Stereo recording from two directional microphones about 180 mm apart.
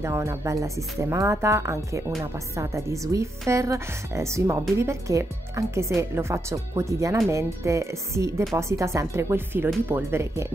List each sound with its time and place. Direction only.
0.0 s speech: 15° right (ahead or behind)